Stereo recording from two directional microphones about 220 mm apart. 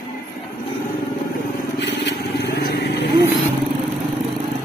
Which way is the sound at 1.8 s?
50° left (ahead or behind).